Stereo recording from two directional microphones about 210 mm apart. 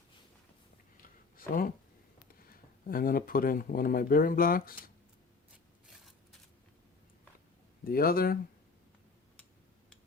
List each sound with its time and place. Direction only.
1.4 s speech: 45° left (ahead or behind)
7.9 s speech: 45° left (ahead or behind)